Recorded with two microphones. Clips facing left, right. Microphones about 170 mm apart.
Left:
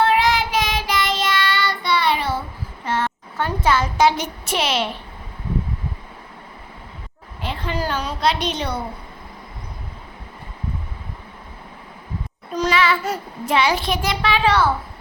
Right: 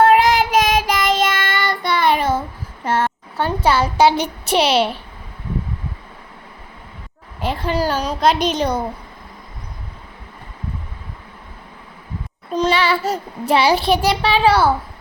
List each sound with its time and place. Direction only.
0.0 s child singing: 45° right (ahead or behind)
2.8 s a sound: 45° right (ahead or behind)
3.4 s a child's voice: 35° right (ahead or behind)
7.4 s a woman's voice: 40° right (ahead or behind)
12.5 s a woman's voice: 30° right (ahead or behind)